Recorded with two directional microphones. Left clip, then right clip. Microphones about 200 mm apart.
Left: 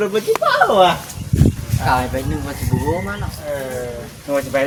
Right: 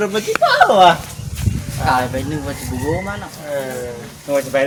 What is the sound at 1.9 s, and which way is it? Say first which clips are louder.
Speech: right 1 dB; 5° right (ahead or behind).